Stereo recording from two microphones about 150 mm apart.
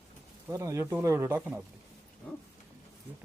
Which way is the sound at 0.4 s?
20° right (ahead or behind).